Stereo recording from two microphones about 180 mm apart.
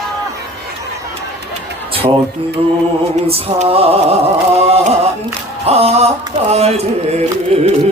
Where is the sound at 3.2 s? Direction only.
35° right (ahead or behind).